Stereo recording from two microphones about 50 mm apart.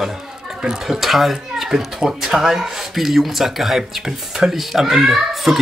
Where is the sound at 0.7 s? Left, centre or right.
Centre.